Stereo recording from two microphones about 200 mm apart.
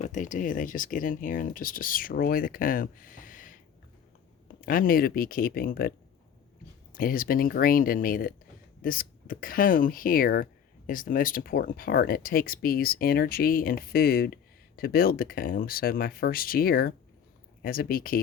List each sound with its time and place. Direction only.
0.0 s speech: 40° left (ahead or behind)
4.6 s speech: 45° left (ahead or behind)
6.9 s speech: 45° left (ahead or behind)